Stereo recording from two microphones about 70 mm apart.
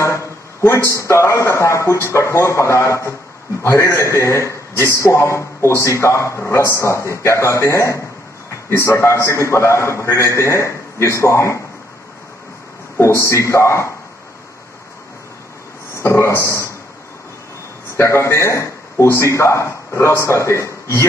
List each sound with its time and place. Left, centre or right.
0.0 s a man's voice: left
12.9 s a man's voice: left
16.0 s a man's voice: left
17.9 s a man's voice: left